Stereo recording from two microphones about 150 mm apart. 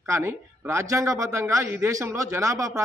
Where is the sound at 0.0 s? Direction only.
15° right (ahead or behind).